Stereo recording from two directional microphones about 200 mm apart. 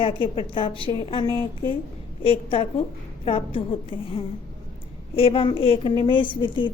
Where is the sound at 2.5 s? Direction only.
30° left (ahead or behind).